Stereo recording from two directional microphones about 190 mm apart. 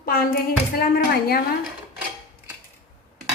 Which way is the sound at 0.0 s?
50° left (ahead or behind).